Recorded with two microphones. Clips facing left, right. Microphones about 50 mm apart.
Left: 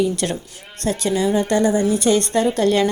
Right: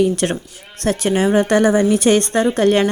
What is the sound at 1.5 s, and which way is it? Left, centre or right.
Speech, right.